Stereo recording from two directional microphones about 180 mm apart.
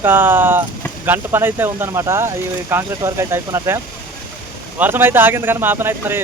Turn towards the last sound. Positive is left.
turn(degrees=-10)  # may be behind; listen again after turning